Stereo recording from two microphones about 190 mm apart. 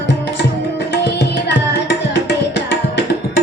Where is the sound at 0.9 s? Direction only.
65° left (ahead or behind).